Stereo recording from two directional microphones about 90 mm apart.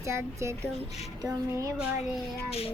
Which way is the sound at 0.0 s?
35° right (ahead or behind).